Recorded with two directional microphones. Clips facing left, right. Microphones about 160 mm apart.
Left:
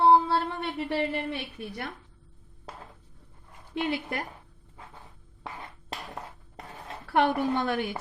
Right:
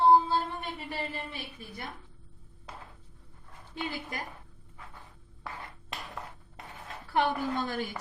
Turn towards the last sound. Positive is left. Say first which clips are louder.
# left 5 dB
turn(degrees=70)  # may be behind; listen again after turning